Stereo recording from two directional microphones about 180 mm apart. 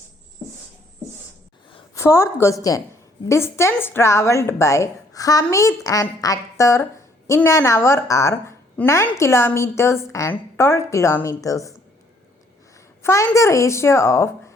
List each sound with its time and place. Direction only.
2.0 s a woman's voice: 15° left (ahead or behind)
13.0 s a woman's voice: 15° left (ahead or behind)